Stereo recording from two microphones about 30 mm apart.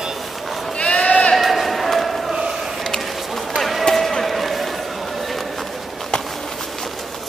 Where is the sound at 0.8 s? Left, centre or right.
Left.